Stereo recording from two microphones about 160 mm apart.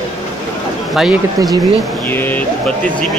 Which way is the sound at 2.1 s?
10° left (ahead or behind).